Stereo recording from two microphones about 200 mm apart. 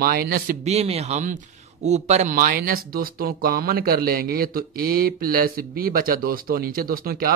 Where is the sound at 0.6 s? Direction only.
30° right (ahead or behind).